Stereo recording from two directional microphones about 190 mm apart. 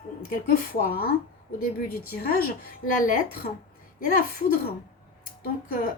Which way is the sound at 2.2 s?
50° left (ahead or behind).